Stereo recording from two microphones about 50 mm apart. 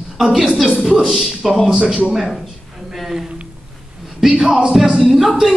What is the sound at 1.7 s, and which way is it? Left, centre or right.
Speech, centre.